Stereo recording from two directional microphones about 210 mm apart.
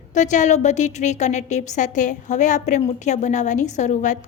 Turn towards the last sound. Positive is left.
turn(degrees=35)  # may be behind; listen again after turning